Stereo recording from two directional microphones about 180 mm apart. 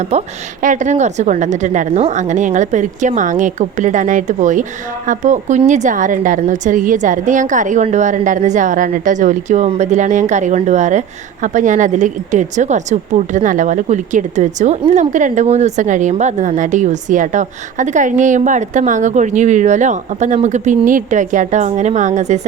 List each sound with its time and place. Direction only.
0.0 s speech: 35° right (ahead or behind)